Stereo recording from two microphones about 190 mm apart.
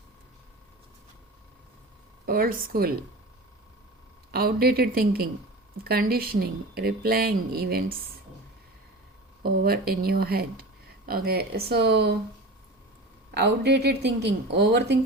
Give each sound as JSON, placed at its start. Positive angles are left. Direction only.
{"t": 2.2, "sound": "speech", "side_deg": -50}
{"t": 4.3, "sound": "speech", "side_deg": -55}
{"t": 9.4, "sound": "speech", "side_deg": -55}
{"t": 13.3, "sound": "speech", "side_deg": -60}